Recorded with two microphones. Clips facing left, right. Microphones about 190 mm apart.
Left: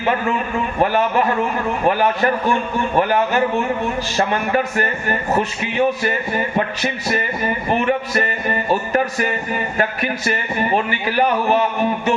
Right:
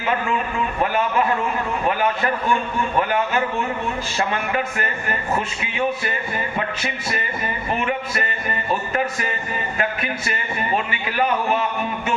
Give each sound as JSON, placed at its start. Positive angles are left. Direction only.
{"t": 0.0, "sound": "a man's voice", "side_deg": 40}
{"t": 4.3, "sound": "a man's voice", "side_deg": 40}